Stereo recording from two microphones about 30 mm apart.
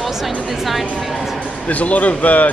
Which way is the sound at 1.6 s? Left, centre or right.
Left.